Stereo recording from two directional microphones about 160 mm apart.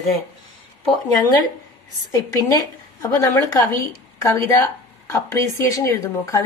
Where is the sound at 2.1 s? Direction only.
20° left (ahead or behind).